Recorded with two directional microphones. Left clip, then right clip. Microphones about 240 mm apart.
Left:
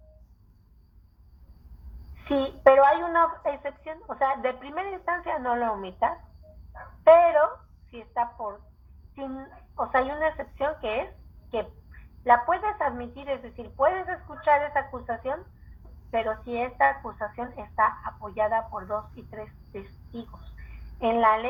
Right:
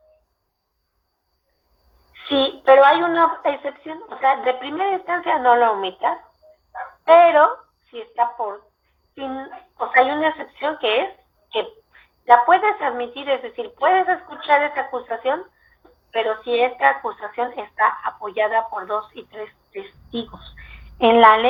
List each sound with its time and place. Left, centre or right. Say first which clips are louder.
2.3 s a woman's voice: right 5 dB; right
7.3 s a woman's voice: right 8 dB; right